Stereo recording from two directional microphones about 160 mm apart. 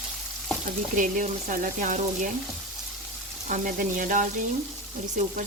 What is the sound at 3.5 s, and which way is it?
Speech, 55° right (ahead or behind).